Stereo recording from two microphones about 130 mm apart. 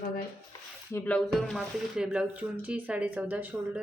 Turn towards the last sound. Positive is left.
turn(degrees=-15)  # may be behind; listen again after turning